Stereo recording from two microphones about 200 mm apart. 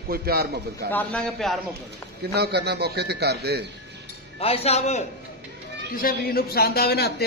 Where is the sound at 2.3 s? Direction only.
55° right (ahead or behind).